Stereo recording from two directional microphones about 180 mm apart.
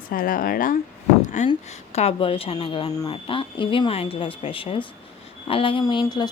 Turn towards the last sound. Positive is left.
turn(degrees=25)  # may be behind; listen again after turning